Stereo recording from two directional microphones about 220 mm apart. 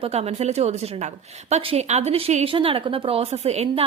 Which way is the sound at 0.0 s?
30° right (ahead or behind).